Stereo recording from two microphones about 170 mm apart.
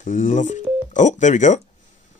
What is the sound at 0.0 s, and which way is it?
Speech, 45° left (ahead or behind).